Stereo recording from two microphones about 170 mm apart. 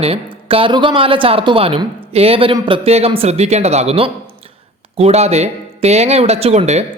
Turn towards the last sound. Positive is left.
turn(degrees=-40)  # may be behind; listen again after turning